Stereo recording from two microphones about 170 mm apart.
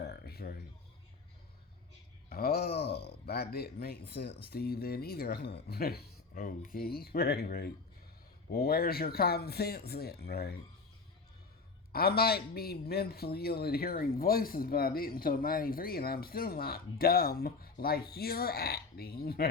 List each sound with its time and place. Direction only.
0.0 s a sound: 70° left (ahead or behind)
2.3 s a man's voice: 65° left (ahead or behind)
11.9 s a man's voice: 65° left (ahead or behind)